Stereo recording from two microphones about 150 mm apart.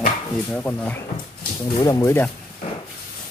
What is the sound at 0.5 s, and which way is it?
Speech, 10° left (ahead or behind).